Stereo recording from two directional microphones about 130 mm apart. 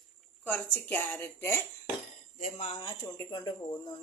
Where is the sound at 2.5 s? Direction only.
45° left (ahead or behind); by 3.5 s 30° left (ahead or behind).